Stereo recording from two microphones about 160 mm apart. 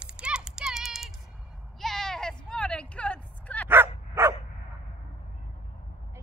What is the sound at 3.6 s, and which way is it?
Dog, 15° right (ahead or behind).